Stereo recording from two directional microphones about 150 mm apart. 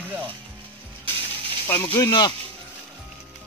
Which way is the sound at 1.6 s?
15° left (ahead or behind).